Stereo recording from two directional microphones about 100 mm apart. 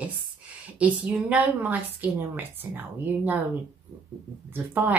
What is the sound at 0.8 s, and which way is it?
Speech, 15° right (ahead or behind).